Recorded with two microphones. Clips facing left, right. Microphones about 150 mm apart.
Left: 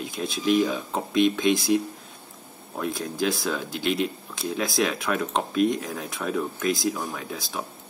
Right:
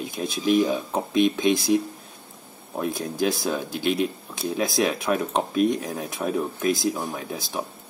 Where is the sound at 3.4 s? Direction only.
20° right (ahead or behind).